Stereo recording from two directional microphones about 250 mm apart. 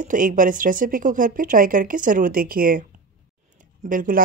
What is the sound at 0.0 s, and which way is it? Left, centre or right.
Speech, right.